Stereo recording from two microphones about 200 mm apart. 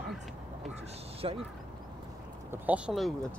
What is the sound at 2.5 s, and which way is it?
Speech, 5° right (ahead or behind).